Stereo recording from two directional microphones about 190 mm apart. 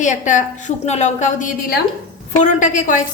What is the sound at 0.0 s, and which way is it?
A woman's voice, 40° left (ahead or behind).